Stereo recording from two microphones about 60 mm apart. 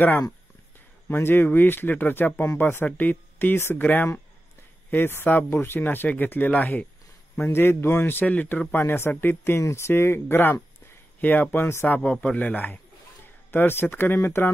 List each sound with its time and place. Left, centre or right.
1.0 s speech: left
3.5 s speech: left
3.8 s a man's voice: left
5.9 s speech: left
7.4 s speech: left
8.3 s speech: left
9.6 s speech: left
12.0 s a man's voice: left